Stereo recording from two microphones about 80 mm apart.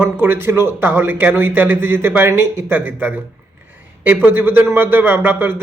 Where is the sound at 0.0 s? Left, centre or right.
Right.